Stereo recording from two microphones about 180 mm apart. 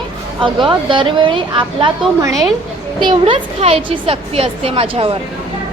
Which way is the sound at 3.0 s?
30° right (ahead or behind).